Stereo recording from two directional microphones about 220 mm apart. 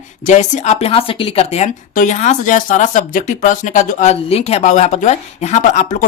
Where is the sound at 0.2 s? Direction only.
35° left (ahead or behind).